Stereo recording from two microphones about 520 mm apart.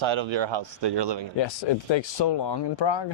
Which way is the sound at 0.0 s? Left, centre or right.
Right.